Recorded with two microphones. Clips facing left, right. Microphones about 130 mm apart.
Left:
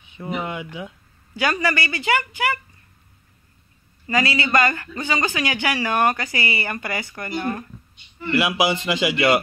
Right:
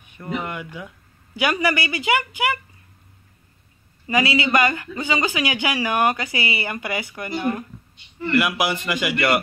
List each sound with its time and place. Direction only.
0.2 s speech: 5° left (ahead or behind)
1.3 s speech: 15° right (ahead or behind)
4.1 s speech: 15° right (ahead or behind)
8.4 s speech: 5° left (ahead or behind)